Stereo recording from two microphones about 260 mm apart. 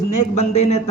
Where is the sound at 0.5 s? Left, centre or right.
Left.